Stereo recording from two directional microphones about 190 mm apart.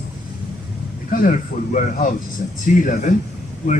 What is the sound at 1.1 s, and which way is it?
Speech, 50° left (ahead or behind).